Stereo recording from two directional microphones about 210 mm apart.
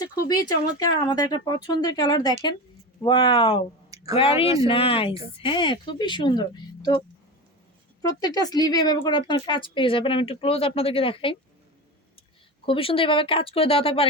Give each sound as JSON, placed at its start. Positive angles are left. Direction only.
{"t": 0.0, "sound": "speech", "side_deg": 20}
{"t": 4.4, "sound": "speech", "side_deg": -15}
{"t": 4.7, "sound": "speech", "side_deg": 25}
{"t": 8.0, "sound": "speech", "side_deg": 20}
{"t": 12.6, "sound": "speech", "side_deg": 25}